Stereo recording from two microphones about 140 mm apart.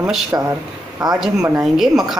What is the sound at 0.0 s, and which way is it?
Speech, 10° right (ahead or behind).